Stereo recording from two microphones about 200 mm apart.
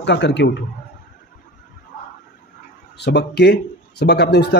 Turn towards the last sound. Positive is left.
turn(degrees=55)  # may be behind; listen again after turning